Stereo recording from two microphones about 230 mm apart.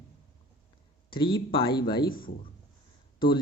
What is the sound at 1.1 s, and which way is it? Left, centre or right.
Speech, left.